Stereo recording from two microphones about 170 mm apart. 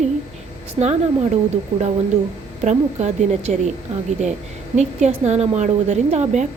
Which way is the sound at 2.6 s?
40° right (ahead or behind).